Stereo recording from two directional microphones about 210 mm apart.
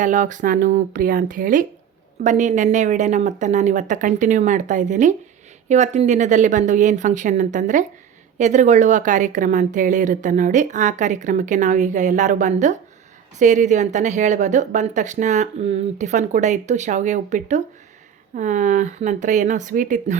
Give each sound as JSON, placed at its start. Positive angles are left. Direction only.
{"t": 0.0, "sound": "a woman's voice", "side_deg": -35}